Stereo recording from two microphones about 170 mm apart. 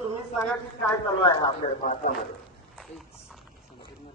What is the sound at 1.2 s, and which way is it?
Speech, 30° left (ahead or behind).